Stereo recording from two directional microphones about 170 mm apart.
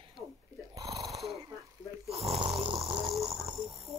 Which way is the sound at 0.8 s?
20° right (ahead or behind).